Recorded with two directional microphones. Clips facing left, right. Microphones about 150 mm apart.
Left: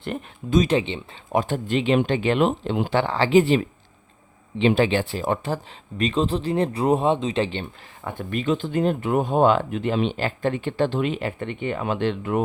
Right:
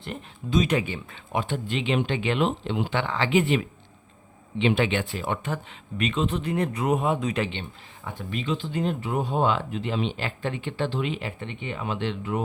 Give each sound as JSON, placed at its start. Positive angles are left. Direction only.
{"t": 0.0, "sound": "speech", "side_deg": 55}
{"t": 0.6, "sound": "speech", "side_deg": 30}
{"t": 1.3, "sound": "speech", "side_deg": 40}
{"t": 8.0, "sound": "speech", "side_deg": 55}